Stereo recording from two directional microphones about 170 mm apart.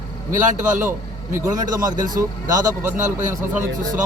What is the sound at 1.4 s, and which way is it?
A man's voice, 20° right (ahead or behind).